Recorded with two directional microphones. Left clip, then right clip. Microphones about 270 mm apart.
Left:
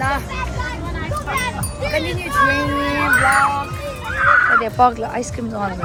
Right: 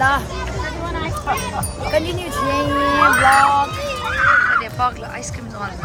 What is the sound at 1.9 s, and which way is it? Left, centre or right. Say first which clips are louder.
A child's voice: even; centre.